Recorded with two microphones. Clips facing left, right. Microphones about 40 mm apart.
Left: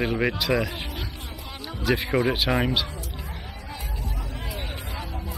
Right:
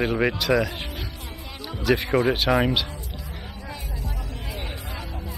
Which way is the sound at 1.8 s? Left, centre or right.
Centre.